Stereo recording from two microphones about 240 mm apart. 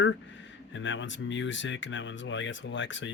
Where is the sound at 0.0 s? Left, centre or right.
Left.